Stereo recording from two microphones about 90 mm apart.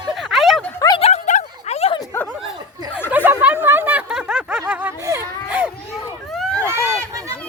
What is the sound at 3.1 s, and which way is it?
Snicker, 20° right (ahead or behind).